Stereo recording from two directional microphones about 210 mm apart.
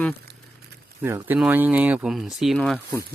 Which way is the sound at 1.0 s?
10° right (ahead or behind).